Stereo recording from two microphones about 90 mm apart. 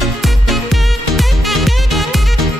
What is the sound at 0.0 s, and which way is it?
Music, centre (ahead or behind).